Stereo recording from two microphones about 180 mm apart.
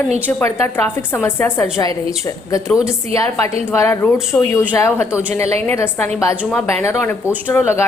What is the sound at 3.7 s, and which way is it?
A woman's voice, 10° left (ahead or behind).